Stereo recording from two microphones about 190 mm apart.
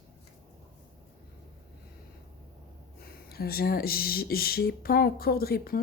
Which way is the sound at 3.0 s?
55° left (ahead or behind).